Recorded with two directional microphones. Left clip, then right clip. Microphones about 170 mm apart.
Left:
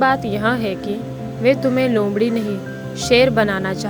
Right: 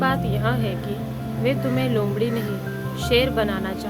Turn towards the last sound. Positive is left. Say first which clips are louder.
# left 6 dB
turn(degrees=40)  # may be behind; listen again after turning